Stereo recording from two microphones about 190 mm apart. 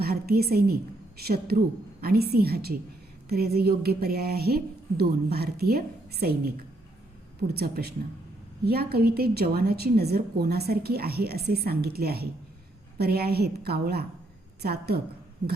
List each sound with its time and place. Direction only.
0.0 s a woman's voice: 55° right (ahead or behind)